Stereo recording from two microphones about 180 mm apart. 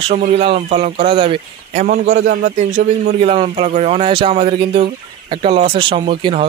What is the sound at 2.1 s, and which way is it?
Speech, 90° right.